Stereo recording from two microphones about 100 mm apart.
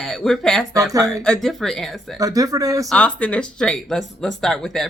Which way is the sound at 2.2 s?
35° right (ahead or behind).